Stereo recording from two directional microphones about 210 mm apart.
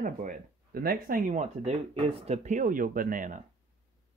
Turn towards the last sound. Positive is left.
turn(degrees=-40)  # may be behind; listen again after turning